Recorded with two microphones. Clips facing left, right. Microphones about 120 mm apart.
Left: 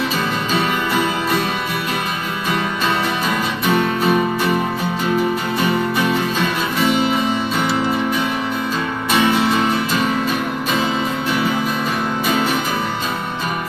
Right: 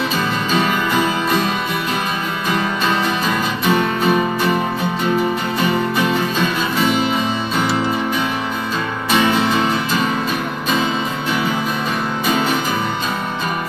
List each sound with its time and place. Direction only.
0.6 s music: 25° right (ahead or behind)
3.6 s music: 25° right (ahead or behind)
5.9 s music: 25° right (ahead or behind)